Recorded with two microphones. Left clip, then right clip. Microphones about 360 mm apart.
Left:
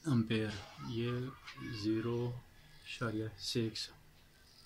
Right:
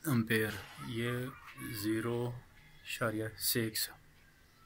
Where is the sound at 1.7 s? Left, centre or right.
Centre.